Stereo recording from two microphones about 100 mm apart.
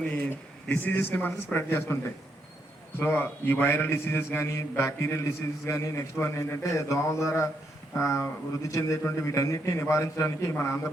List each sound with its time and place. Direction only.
0.3 s a man's voice: 20° left (ahead or behind)